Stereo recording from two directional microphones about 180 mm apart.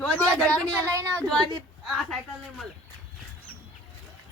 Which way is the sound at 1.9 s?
Centre (ahead or behind).